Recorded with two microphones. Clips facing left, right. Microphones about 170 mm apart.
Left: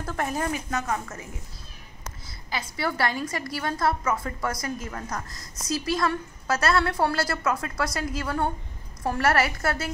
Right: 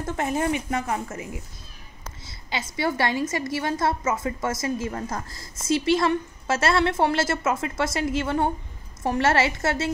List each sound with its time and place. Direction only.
0.0 s a woman's voice: 20° right (ahead or behind)
2.2 s a woman's voice: 25° right (ahead or behind)